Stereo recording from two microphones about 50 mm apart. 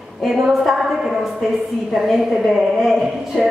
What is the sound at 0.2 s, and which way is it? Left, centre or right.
A woman's voice, centre.